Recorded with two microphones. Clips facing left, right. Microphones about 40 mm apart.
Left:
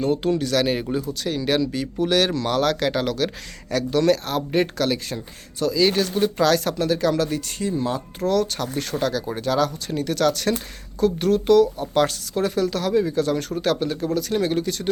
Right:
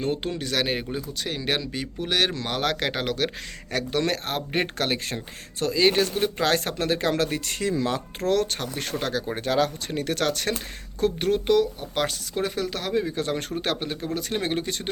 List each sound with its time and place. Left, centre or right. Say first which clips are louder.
0.0 s speech: left 6 dB; right
6.7 s speech: left 3 dB; right
7.6 s speech: even; right
8.3 s speech: left 2 dB; right
8.5 s speech: left 4 dB; right